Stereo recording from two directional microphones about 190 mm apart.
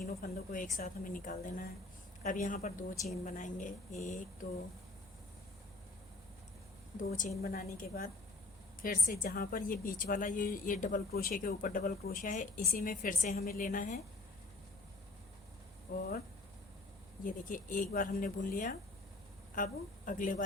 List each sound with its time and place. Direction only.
0.0 s a woman's voice: 50° left (ahead or behind)
6.9 s a woman's voice: 45° left (ahead or behind)
16.0 s a woman's voice: 50° left (ahead or behind)
17.2 s a woman's voice: 45° left (ahead or behind)